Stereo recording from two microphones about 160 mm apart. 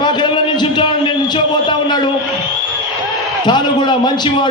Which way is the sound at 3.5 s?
30° left (ahead or behind).